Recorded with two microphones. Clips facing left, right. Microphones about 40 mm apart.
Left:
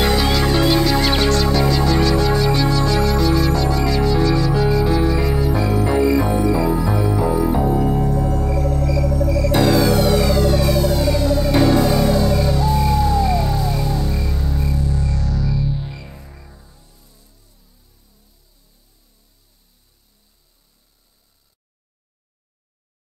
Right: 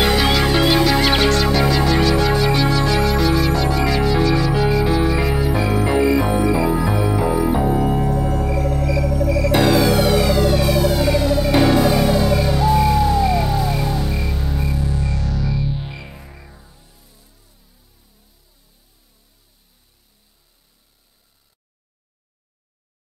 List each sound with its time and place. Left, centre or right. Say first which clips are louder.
0.0 s music: right 1 dB; right